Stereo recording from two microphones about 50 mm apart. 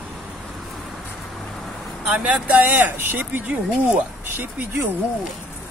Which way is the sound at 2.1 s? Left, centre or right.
Right.